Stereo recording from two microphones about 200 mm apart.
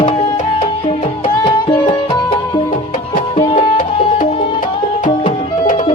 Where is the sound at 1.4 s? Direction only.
25° left (ahead or behind).